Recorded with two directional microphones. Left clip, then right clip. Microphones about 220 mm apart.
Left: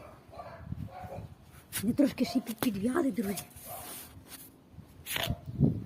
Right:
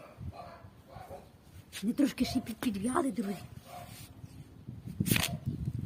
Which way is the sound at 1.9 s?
5° left (ahead or behind).